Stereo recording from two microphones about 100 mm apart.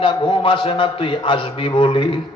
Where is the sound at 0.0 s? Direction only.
55° left (ahead or behind).